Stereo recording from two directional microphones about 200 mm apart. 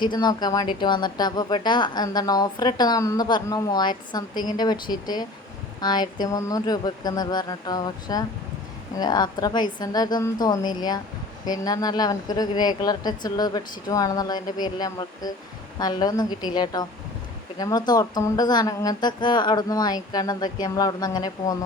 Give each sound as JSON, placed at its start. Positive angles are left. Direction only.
{"t": 0.0, "sound": "speech", "side_deg": 20}